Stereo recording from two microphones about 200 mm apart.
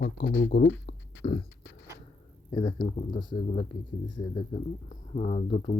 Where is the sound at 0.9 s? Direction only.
40° left (ahead or behind).